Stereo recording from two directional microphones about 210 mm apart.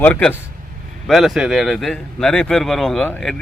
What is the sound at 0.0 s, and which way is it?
A man's voice, 5° left (ahead or behind).